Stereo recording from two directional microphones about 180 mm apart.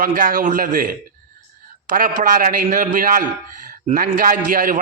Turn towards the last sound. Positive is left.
turn(degrees=-50)  # may be behind; listen again after turning